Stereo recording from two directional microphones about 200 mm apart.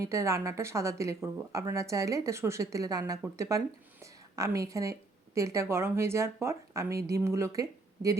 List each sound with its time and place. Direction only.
0.0 s a woman's voice: 15° right (ahead or behind)